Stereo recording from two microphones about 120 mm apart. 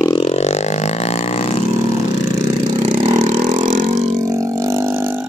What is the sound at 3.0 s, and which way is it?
Vehicle, 80° right.